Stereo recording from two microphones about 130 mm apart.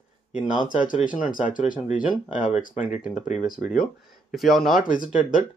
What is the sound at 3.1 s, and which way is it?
Speech, 70° left (ahead or behind).